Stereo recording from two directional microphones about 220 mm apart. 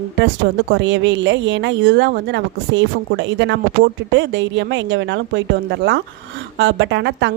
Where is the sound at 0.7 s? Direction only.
55° right (ahead or behind).